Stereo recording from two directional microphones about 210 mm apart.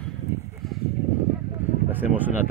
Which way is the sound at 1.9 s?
10° right (ahead or behind).